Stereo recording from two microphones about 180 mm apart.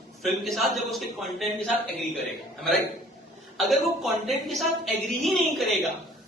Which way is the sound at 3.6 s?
Centre (ahead or behind).